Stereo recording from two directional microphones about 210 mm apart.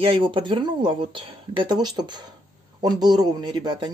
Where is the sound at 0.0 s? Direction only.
25° right (ahead or behind).